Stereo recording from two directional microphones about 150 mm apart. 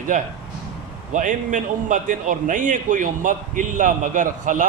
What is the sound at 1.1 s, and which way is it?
A man's voice, 55° right (ahead or behind).